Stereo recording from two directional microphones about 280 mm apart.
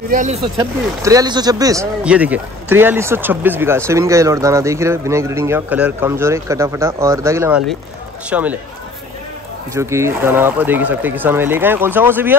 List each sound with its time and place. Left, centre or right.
0.1 s speech: right
0.6 s speech: centre
9.8 s speech: centre